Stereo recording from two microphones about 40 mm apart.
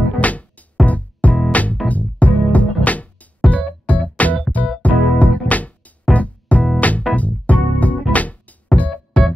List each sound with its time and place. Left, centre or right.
0.0 s music: left